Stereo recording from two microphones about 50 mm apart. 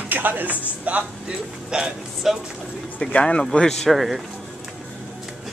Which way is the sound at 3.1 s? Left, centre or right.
Left.